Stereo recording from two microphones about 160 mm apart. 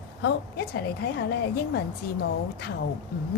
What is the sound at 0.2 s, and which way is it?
A woman's voice, 90° left.